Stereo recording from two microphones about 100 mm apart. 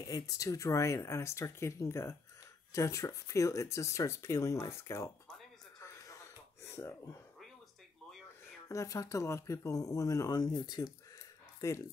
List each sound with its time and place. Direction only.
0.1 s speech: 35° left (ahead or behind)
6.0 s a sound: 30° left (ahead or behind)
8.6 s speech: 35° left (ahead or behind)
11.6 s speech: 30° left (ahead or behind)